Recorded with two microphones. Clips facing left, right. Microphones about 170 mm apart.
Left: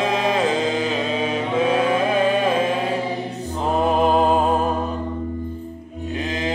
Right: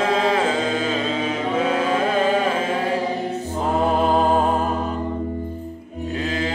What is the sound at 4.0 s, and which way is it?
Music, 20° left (ahead or behind).